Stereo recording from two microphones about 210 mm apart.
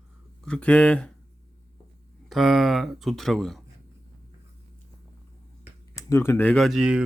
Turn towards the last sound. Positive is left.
turn(degrees=-5)  # may be behind; listen again after turning